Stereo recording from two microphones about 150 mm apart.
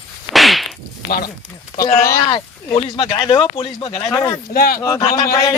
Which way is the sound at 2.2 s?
30° left (ahead or behind).